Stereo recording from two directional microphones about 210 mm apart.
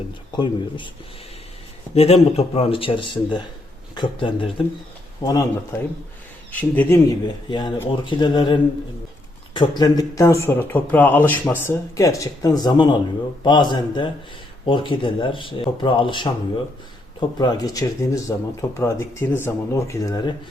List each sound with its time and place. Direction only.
0.3 s speech: 20° left (ahead or behind)
2.0 s speech: 30° left (ahead or behind)
6.5 s speech: 10° left (ahead or behind)
9.6 s speech: 20° left (ahead or behind)